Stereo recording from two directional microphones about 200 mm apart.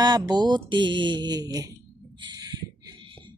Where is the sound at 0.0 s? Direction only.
20° right (ahead or behind).